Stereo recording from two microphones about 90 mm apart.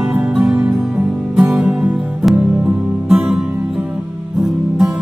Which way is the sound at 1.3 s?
10° right (ahead or behind).